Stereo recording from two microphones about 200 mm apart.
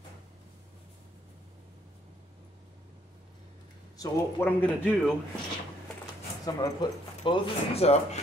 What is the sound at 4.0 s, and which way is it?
Speech, 15° left (ahead or behind).